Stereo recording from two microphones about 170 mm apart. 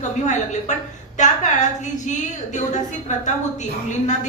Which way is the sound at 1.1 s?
45° left (ahead or behind).